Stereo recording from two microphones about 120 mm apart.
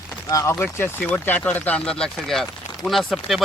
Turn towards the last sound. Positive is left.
turn(degrees=0)  # may be behind; listen again after turning